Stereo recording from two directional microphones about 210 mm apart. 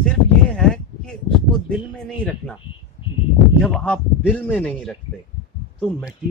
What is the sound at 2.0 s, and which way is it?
Speech, 5° left (ahead or behind).